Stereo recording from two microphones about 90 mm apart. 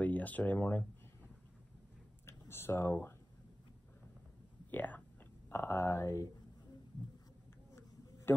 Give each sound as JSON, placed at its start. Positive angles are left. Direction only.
{"t": 0.0, "sound": "speech", "side_deg": 20}
{"t": 2.2, "sound": "speech", "side_deg": 30}
{"t": 4.6, "sound": "speech", "side_deg": 20}